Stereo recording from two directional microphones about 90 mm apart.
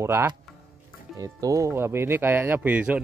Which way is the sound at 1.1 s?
40° right (ahead or behind).